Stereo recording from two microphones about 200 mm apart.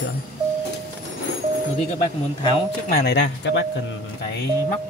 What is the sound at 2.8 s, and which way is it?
Speech, 55° left (ahead or behind).